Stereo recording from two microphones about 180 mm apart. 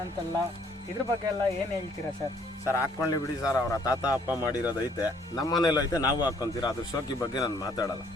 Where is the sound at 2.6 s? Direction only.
15° left (ahead or behind).